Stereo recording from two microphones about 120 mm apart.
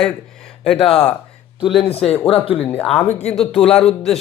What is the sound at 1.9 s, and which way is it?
Speech, 55° left (ahead or behind).